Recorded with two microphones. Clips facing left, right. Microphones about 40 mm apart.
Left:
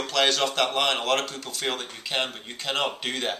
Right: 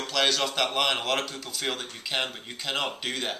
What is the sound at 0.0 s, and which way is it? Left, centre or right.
Speech, centre.